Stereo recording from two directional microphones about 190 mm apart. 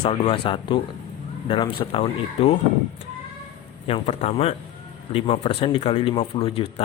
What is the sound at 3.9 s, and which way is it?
Speech, 35° left (ahead or behind).